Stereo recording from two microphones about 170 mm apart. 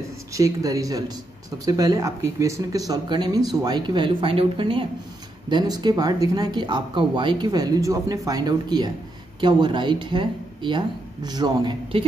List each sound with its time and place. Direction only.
0.3 s speech: 20° right (ahead or behind)